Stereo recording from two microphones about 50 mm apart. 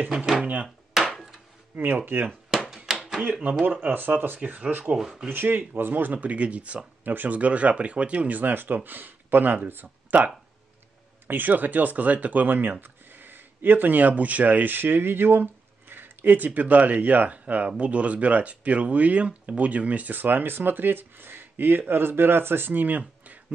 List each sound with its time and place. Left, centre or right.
0.1 s a sound: centre
1.7 s speech: right
2.1 s speech: right
2.5 s a sound: centre
3.9 s speech: right
4.9 s speech: centre
5.3 s speech: right
6.1 s speech: right